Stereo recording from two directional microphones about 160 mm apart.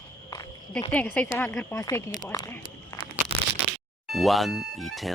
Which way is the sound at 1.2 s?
10° left (ahead or behind).